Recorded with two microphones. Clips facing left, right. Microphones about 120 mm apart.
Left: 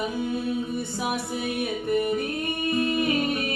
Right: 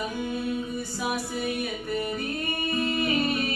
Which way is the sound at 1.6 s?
25° left (ahead or behind).